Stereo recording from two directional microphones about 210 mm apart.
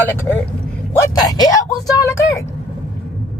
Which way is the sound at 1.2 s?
20° left (ahead or behind).